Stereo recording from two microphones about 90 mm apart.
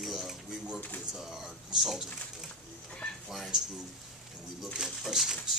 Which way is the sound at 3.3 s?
Centre (ahead or behind).